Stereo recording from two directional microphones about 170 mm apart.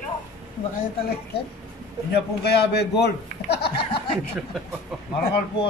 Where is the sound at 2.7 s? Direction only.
75° left (ahead or behind).